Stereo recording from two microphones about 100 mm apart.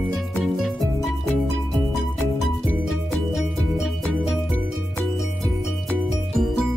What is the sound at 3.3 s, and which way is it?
Music, centre (ahead or behind).